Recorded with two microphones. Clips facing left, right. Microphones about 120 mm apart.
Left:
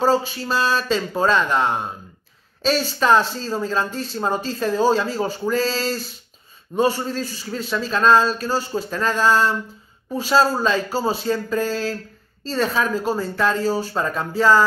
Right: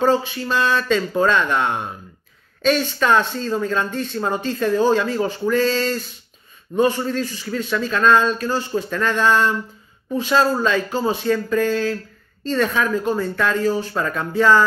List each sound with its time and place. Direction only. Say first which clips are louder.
0.0 s speech: right 1 dB; 35° left (ahead or behind)